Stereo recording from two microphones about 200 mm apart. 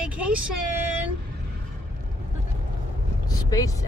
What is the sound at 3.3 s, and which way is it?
Vehicle, 20° left (ahead or behind).